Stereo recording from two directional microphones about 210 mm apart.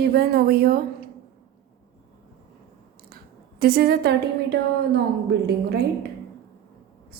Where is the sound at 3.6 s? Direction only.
45° right (ahead or behind).